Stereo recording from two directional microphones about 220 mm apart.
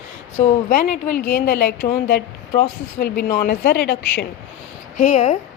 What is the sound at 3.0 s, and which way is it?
A woman's voice, 45° left (ahead or behind).